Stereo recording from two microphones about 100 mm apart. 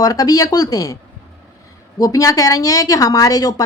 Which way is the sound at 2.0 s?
35° left (ahead or behind).